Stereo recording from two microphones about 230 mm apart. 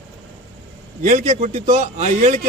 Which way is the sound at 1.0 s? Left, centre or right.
Right.